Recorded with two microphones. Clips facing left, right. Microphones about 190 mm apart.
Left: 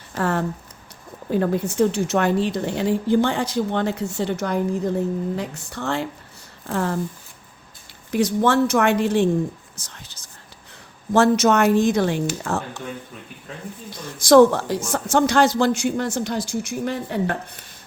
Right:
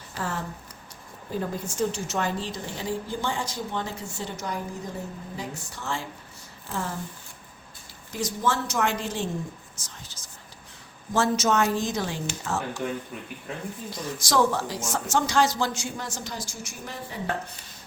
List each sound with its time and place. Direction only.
0.2 s a man's voice: 65° left (ahead or behind)
8.1 s a man's voice: 65° left (ahead or behind)
9.7 s whispering: 65° left (ahead or behind)
11.1 s a man's voice: 65° left (ahead or behind)
14.2 s a man's voice: 55° left (ahead or behind)